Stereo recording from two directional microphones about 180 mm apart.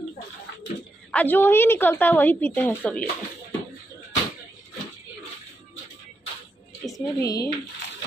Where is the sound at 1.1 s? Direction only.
10° left (ahead or behind).